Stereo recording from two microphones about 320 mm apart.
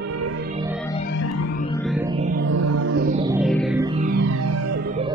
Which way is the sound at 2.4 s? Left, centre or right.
Right.